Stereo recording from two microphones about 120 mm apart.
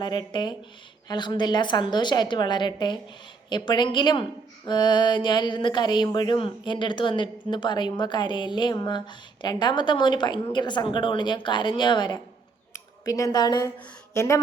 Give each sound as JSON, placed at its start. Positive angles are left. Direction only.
{"t": 0.0, "sound": "speech", "side_deg": 40}
{"t": 12.7, "sound": "speech", "side_deg": 30}